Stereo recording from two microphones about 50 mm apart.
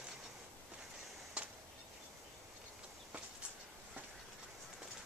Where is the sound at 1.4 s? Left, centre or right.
Right.